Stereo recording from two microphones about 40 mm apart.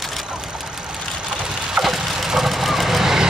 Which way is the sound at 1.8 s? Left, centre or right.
Centre.